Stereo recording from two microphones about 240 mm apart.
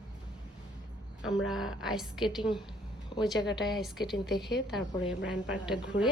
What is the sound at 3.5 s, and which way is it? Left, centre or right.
A woman's voice, centre.